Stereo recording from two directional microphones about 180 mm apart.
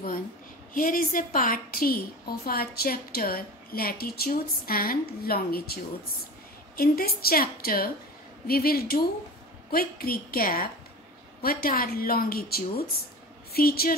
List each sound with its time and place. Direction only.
0.7 s a woman's voice: 50° left (ahead or behind)
6.8 s a woman's voice: 55° left (ahead or behind)